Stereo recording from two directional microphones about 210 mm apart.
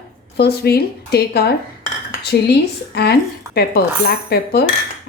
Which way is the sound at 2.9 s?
50° left (ahead or behind).